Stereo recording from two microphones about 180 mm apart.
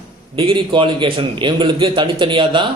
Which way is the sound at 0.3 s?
30° right (ahead or behind).